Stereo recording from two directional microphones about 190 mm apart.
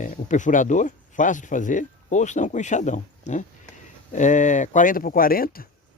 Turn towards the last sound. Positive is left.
turn(degrees=50)  # may be behind; listen again after turning